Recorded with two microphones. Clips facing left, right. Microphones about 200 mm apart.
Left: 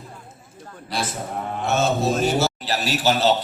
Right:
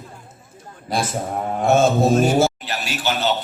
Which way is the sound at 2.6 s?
35° left (ahead or behind).